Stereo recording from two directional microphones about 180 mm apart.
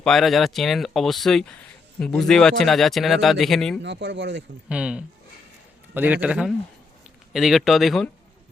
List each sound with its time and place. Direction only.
0.0 s speech: centre (ahead or behind)
3.8 s speech: 80° right
4.7 s a man's voice: 5° right (ahead or behind)